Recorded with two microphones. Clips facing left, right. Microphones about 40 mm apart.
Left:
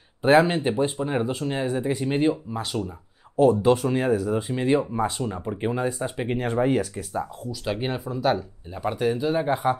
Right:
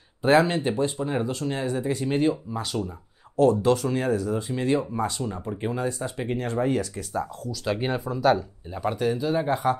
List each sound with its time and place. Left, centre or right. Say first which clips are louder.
0.2 s speech: left 2 dB; centre